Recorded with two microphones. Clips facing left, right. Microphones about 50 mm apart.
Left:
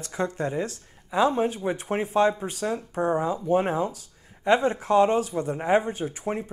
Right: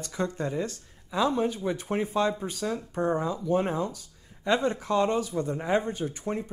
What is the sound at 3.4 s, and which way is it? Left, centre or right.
Speech, left.